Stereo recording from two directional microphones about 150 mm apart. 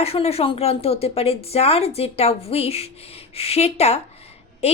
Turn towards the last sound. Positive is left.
turn(degrees=45)  # may be behind; listen again after turning